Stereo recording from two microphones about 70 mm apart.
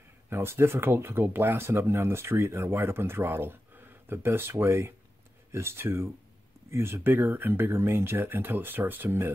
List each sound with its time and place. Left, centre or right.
0.3 s speech: right